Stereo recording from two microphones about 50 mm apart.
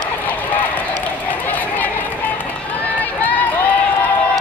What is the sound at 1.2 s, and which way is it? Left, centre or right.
Run, left.